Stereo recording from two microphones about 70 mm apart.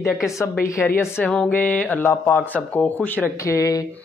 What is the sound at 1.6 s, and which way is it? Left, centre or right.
Speech, left.